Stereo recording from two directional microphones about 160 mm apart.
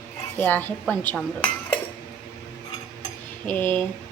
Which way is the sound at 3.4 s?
10° left (ahead or behind).